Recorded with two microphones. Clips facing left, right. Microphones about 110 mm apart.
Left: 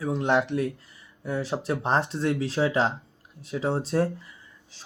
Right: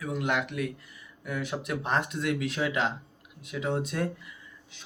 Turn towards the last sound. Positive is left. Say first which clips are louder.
# even
turn(degrees=35)  # may be behind; listen again after turning